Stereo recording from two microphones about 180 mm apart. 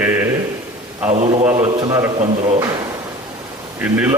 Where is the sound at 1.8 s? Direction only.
20° right (ahead or behind).